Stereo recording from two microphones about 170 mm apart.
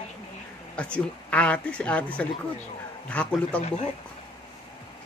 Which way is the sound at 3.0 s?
10° left (ahead or behind).